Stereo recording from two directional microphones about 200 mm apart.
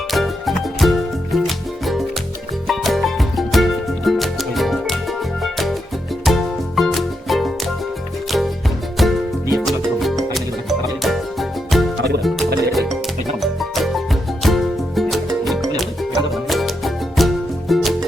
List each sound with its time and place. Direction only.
0.1 s music: centre (ahead or behind)
11.9 s music: 55° right (ahead or behind)
12.9 s music: centre (ahead or behind)